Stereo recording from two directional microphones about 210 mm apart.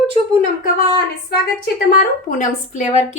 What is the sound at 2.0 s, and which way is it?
A woman's voice, 40° left (ahead or behind).